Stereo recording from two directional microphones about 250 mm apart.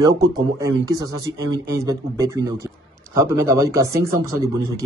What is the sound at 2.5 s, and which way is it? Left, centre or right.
Speech, centre.